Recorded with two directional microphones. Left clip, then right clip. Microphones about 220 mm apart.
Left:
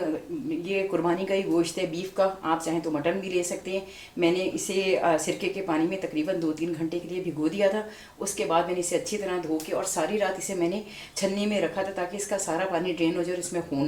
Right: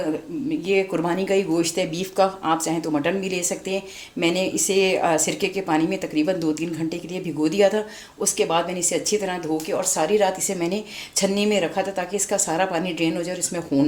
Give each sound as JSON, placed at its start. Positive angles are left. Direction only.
{"t": 0.7, "sound": "speech", "side_deg": -50}
{"t": 8.2, "sound": "speech", "side_deg": -50}